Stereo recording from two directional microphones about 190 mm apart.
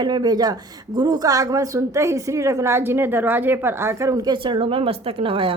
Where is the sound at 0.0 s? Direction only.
20° right (ahead or behind).